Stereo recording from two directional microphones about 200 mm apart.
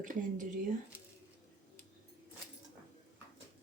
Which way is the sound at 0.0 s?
40° right (ahead or behind).